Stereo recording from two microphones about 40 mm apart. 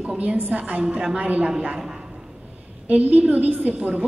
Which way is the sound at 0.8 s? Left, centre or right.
Right.